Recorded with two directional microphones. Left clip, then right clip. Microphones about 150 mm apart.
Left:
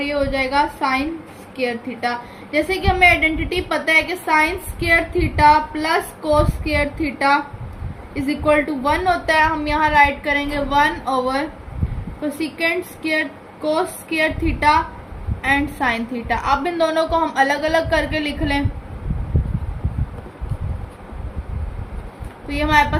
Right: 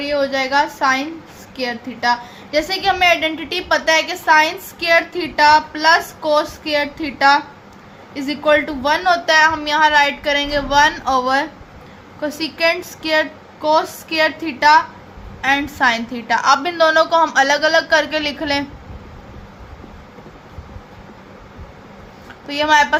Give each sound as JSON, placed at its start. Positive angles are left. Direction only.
{"t": 0.1, "sound": "a woman's voice", "side_deg": -65}
{"t": 2.5, "sound": "a woman's voice", "side_deg": -65}
{"t": 22.4, "sound": "a woman's voice", "side_deg": -55}